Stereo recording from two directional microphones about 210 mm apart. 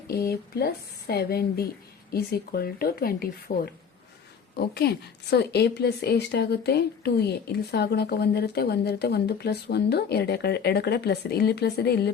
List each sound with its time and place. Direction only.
0.3 s a woman's voice: 50° left (ahead or behind)